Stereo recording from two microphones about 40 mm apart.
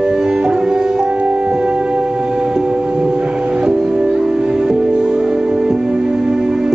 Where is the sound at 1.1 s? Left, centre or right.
Right.